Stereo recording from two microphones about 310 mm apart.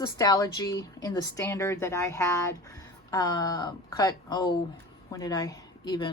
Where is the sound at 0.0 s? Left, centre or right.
Centre.